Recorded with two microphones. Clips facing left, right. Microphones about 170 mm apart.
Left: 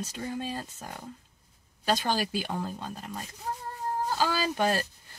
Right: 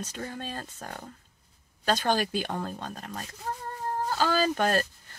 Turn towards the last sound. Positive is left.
turn(degrees=10)  # may be behind; listen again after turning